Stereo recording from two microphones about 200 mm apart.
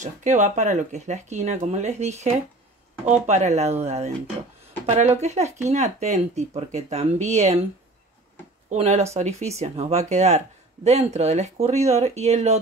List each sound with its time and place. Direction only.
0.0 s speech: 35° right (ahead or behind)
8.6 s speech: 35° right (ahead or behind)